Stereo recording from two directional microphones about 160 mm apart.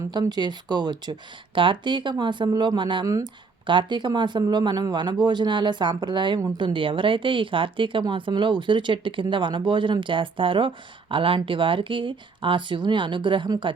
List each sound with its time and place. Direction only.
0.1 s speech: 25° right (ahead or behind)